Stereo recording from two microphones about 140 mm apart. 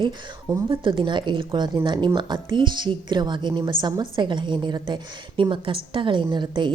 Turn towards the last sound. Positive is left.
turn(degrees=-35)  # may be behind; listen again after turning